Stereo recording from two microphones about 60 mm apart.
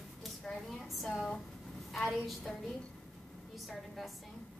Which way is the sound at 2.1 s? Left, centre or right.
Centre.